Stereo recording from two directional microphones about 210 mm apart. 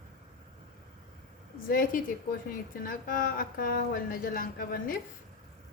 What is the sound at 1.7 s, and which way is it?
Speech, 40° left (ahead or behind).